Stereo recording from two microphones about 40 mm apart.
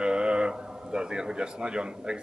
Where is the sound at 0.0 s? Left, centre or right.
Right.